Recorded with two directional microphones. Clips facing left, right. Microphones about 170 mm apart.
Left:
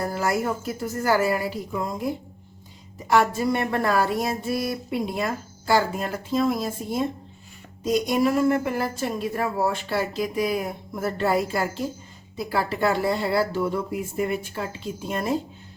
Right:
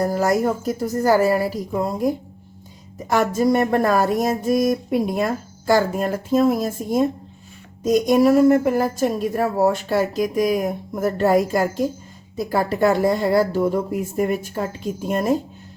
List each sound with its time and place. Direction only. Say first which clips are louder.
0.0 s a woman's voice: right 6 dB; 40° right (ahead or behind)